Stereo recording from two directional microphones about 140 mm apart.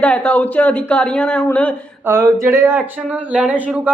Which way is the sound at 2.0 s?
20° right (ahead or behind).